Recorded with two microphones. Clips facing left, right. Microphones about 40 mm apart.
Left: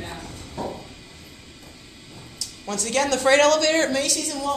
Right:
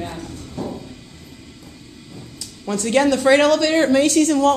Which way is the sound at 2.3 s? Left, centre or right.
Right.